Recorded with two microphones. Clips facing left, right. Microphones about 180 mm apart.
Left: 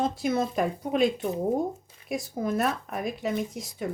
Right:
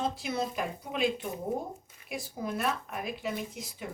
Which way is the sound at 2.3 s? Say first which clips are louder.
Left 5 dB; 45° left (ahead or behind).